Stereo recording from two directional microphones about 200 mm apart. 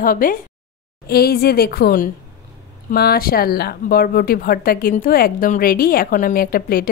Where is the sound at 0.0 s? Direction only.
45° left (ahead or behind).